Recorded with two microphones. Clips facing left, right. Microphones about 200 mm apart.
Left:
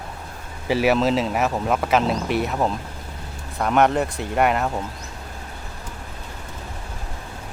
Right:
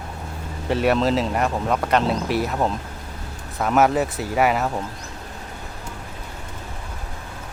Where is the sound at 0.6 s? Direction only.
5° left (ahead or behind).